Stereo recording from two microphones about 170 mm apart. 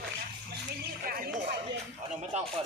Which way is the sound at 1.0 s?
55° right (ahead or behind).